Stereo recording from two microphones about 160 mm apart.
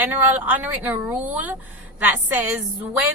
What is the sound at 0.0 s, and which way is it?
A woman's voice, 10° right (ahead or behind).